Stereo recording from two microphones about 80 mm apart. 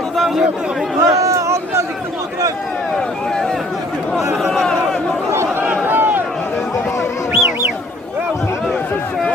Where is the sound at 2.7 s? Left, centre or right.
Centre.